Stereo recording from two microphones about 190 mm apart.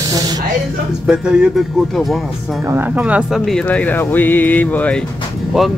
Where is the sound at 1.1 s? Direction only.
5° right (ahead or behind).